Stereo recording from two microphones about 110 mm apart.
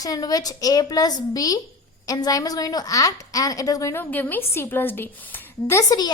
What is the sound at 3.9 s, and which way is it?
A woman's voice, 15° left (ahead or behind).